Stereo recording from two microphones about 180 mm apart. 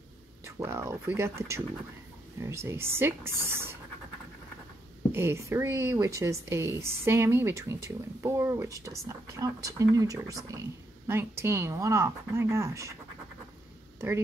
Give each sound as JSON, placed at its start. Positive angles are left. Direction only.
{"t": 0.6, "sound": "speech", "side_deg": -15}
{"t": 5.1, "sound": "speech", "side_deg": -15}
{"t": 13.9, "sound": "speech", "side_deg": -15}